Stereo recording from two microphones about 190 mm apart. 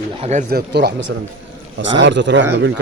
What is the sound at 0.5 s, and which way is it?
Speech, 60° right (ahead or behind).